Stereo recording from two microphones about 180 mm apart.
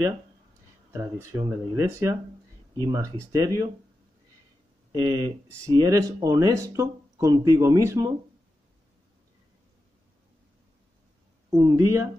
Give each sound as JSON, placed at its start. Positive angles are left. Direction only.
{"t": 0.9, "sound": "speech", "side_deg": -15}
{"t": 4.9, "sound": "speech", "side_deg": -20}
{"t": 11.5, "sound": "speech", "side_deg": -20}